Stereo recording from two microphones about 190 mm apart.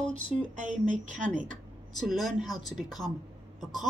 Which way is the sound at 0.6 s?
40° right (ahead or behind).